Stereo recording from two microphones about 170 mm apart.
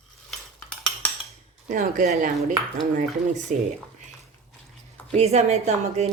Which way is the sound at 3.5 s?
45° right (ahead or behind).